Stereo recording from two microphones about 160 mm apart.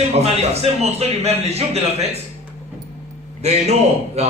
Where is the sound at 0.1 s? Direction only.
40° right (ahead or behind).